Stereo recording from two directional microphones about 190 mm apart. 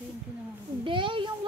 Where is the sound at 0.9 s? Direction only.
25° right (ahead or behind).